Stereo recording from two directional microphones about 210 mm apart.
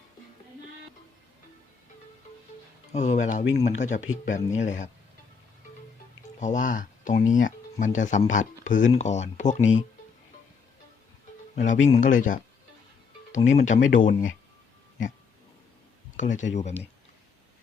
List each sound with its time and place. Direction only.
2.9 s speech: 35° left (ahead or behind)
6.4 s speech: 35° left (ahead or behind)
11.5 s speech: 35° left (ahead or behind)
13.7 s speech: 65° left (ahead or behind)
14.0 s speech: 40° left (ahead or behind)
16.1 s speech: 35° left (ahead or behind)